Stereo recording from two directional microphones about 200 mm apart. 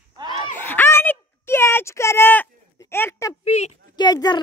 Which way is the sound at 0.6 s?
10° left (ahead or behind).